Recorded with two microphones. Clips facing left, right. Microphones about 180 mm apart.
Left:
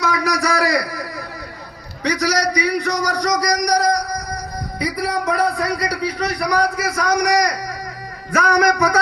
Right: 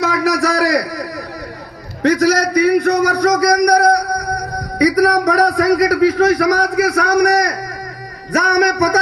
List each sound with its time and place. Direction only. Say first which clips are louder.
0.0 s a sound: right 4 dB; 50° right (ahead or behind)
2.0 s a man's voice: right 6 dB; 50° right (ahead or behind); by 6.5 s 90° right
6.6 s a man's voice: right 5 dB; 70° right (ahead or behind)
8.3 s music: right 2 dB; 35° right (ahead or behind)